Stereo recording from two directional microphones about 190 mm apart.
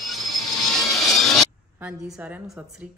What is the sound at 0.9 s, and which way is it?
Speech, 5° right (ahead or behind).